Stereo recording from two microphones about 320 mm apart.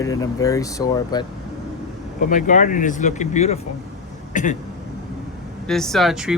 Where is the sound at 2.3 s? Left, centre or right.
Left.